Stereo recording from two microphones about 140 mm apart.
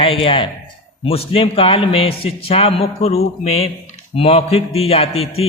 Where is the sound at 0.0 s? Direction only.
40° left (ahead or behind).